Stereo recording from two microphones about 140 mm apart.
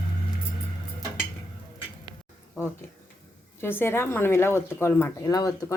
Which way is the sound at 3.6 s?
15° left (ahead or behind).